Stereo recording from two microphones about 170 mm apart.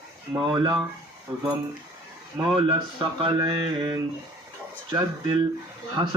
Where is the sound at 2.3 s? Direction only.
25° right (ahead or behind).